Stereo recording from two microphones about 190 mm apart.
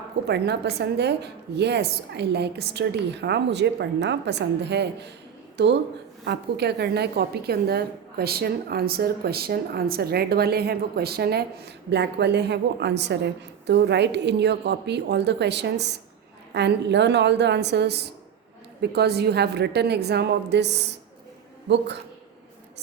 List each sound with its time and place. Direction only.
0.3 s a woman's voice: 60° right (ahead or behind)